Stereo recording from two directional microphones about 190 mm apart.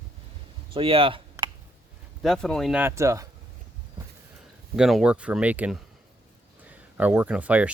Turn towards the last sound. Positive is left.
turn(degrees=-5)  # may be behind; listen again after turning